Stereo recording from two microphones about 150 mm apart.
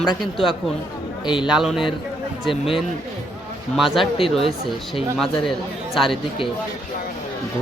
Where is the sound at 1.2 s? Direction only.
30° left (ahead or behind).